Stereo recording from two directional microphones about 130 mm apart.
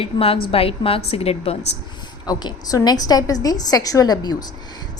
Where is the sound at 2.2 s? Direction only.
30° left (ahead or behind).